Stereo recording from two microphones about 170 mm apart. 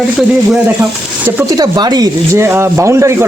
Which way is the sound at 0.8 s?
15° right (ahead or behind).